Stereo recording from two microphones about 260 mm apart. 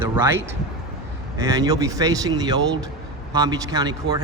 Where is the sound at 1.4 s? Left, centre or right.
Centre.